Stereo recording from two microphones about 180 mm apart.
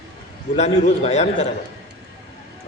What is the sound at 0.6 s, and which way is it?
Speech, 40° left (ahead or behind).